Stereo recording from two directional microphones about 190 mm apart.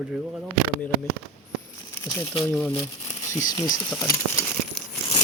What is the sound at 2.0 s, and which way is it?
Speech, 15° left (ahead or behind).